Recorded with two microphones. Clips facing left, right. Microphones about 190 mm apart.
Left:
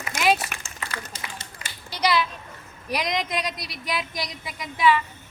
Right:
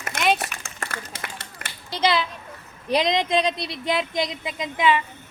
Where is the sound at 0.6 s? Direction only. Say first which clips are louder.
Right 1 dB; 55° right (ahead or behind).